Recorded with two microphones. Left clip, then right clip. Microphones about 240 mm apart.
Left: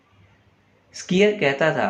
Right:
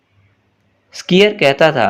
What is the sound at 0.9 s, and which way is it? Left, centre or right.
Speech, right.